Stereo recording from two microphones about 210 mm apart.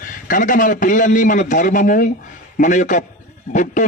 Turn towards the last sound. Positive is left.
turn(degrees=35)  # may be behind; listen again after turning